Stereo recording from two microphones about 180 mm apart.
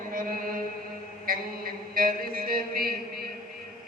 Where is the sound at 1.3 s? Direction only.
50° right (ahead or behind).